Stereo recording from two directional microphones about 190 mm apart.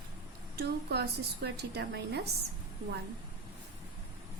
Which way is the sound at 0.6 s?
55° right (ahead or behind).